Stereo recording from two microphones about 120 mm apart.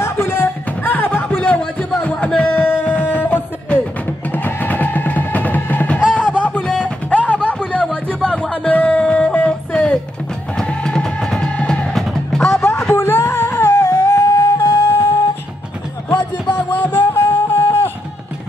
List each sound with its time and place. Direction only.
0.0 s music: 20° left (ahead or behind)
7.1 s a sound: 10° left (ahead or behind)
7.8 s music: 10° left (ahead or behind)
12.6 s music: 20° left (ahead or behind)